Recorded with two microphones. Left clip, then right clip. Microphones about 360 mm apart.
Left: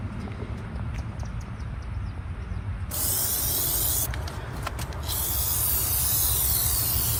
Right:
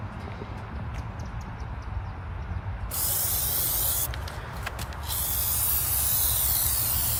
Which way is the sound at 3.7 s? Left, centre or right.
Centre.